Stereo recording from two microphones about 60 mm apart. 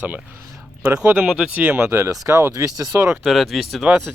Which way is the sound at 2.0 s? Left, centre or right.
Right.